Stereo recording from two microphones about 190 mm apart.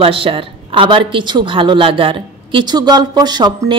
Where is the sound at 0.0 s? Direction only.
30° right (ahead or behind).